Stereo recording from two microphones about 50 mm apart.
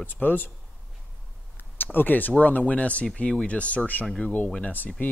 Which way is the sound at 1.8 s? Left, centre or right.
Left.